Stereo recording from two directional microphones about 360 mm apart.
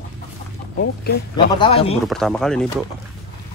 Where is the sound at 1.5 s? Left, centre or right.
Centre.